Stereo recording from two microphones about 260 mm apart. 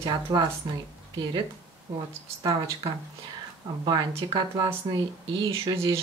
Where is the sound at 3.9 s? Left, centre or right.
Centre.